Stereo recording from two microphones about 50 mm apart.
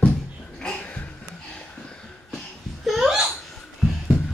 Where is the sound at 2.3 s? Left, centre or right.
Centre.